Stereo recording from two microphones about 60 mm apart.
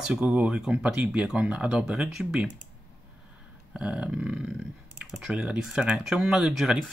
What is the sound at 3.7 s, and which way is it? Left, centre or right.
Speech, centre.